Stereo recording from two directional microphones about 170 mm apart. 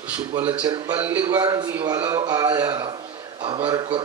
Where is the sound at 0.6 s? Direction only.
25° right (ahead or behind).